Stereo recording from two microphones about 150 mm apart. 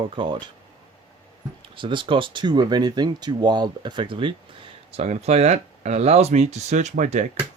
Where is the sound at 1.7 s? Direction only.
35° right (ahead or behind).